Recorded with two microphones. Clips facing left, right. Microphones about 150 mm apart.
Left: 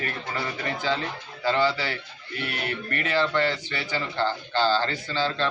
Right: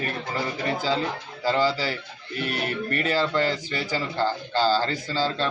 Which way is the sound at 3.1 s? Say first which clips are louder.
Left 1 dB; 35° right (ahead or behind).